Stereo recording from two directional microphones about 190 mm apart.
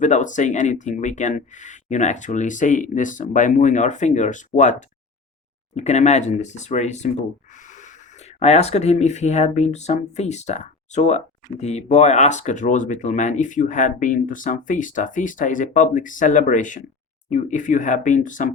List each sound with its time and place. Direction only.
0.0 s speech: 40° left (ahead or behind)
5.7 s speech: 40° left (ahead or behind)